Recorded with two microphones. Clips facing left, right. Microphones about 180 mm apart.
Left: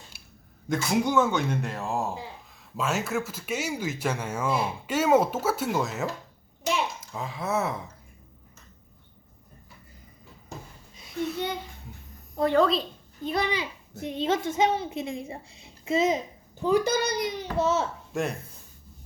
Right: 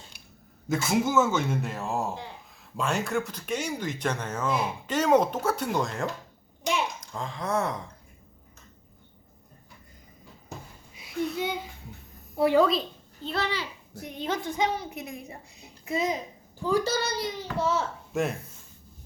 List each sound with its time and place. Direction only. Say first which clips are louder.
0.7 s a child's voice: even; centre (ahead or behind)
10.9 s a sound: right 1 dB; centre (ahead or behind)
12.4 s speech: right 1 dB; 5° right (ahead or behind)
13.2 s a child's voice: left 3 dB; 15° left (ahead or behind)
18.1 s speech: right 2 dB; centre (ahead or behind)